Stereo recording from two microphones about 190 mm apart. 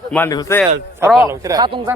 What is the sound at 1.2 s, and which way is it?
Speech, 15° right (ahead or behind).